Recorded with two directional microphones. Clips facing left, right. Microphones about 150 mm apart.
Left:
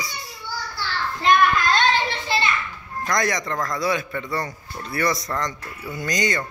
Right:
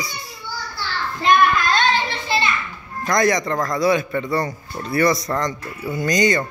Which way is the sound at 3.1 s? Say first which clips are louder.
Right 6 dB; 25° right (ahead or behind).